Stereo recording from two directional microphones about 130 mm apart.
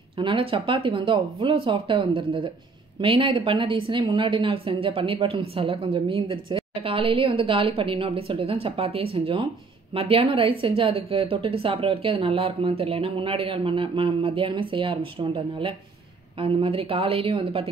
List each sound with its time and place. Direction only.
0.2 s speech: 45° right (ahead or behind)